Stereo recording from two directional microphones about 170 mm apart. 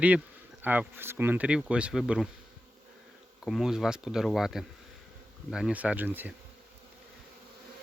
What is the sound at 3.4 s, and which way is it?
Speech, 5° right (ahead or behind).